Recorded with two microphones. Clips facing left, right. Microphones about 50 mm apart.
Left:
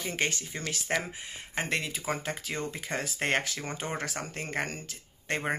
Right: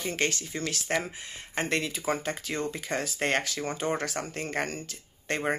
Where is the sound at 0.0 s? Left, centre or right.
Centre.